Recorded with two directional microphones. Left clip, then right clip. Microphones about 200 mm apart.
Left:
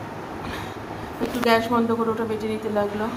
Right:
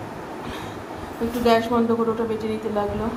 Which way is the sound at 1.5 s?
10° left (ahead or behind).